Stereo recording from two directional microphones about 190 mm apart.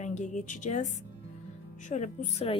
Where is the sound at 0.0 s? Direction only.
40° left (ahead or behind).